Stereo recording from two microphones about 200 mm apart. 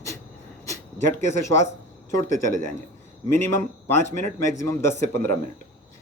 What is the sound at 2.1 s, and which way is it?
Speech, 15° left (ahead or behind).